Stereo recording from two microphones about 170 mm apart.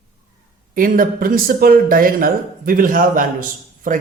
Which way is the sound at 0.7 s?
55° right (ahead or behind).